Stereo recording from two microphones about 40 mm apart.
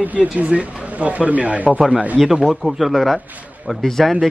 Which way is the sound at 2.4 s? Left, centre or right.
Centre.